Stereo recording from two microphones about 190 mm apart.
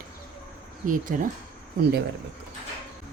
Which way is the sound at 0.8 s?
45° right (ahead or behind).